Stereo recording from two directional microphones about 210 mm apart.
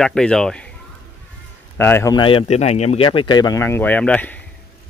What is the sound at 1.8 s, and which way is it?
A man's voice, 10° left (ahead or behind).